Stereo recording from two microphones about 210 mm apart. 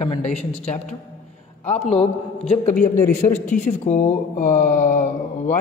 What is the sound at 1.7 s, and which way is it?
A man's voice, 30° left (ahead or behind).